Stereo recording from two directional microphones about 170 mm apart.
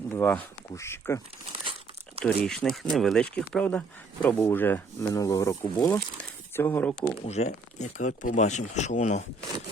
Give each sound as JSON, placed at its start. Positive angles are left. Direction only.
{"t": 0.1, "sound": "speech", "side_deg": 10}
{"t": 2.2, "sound": "speech", "side_deg": 5}
{"t": 7.3, "sound": "speech", "side_deg": 40}